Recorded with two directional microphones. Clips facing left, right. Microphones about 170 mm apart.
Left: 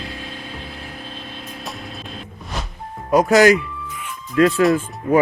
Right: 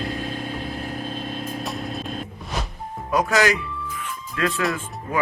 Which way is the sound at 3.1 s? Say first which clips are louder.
Left 7 dB; 40° left (ahead or behind).